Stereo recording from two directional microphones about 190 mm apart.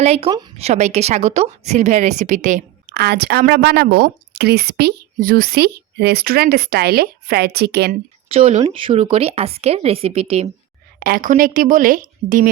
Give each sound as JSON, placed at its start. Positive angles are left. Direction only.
{"t": 0.0, "sound": "a woman's voice", "side_deg": -35}
{"t": 8.3, "sound": "speech", "side_deg": -35}
{"t": 11.0, "sound": "speech", "side_deg": -45}